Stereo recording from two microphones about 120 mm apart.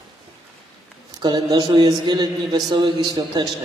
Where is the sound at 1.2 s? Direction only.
40° right (ahead or behind).